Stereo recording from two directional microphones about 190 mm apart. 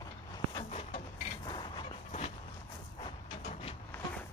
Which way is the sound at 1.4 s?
25° left (ahead or behind).